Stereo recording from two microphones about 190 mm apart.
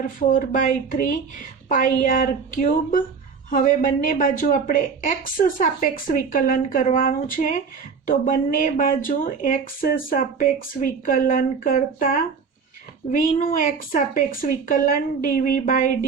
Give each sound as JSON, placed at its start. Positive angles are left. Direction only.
{"t": 0.0, "sound": "speech", "side_deg": 45}